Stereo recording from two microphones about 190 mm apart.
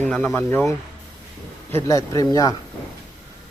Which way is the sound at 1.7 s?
15° left (ahead or behind).